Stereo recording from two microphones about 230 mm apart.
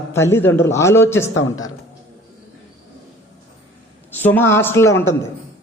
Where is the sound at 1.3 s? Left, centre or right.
Left.